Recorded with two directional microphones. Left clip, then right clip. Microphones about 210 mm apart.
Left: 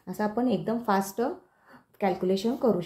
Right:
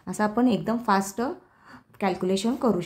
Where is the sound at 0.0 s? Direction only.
30° right (ahead or behind).